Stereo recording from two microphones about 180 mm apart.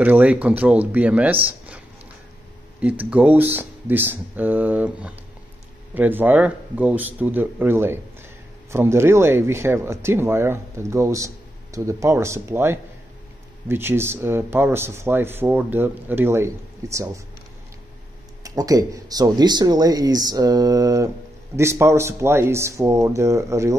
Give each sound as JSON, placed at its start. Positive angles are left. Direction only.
{"t": 0.0, "sound": "speech", "side_deg": -10}
{"t": 2.8, "sound": "speech", "side_deg": -5}
{"t": 18.4, "sound": "speech", "side_deg": -20}